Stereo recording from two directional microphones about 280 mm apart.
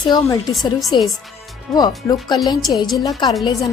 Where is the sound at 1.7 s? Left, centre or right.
Centre.